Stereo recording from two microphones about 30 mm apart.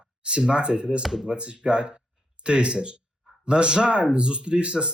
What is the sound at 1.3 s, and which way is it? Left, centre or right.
Speech, right.